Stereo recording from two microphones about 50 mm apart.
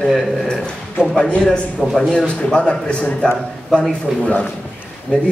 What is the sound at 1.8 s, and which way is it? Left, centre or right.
Speech, centre.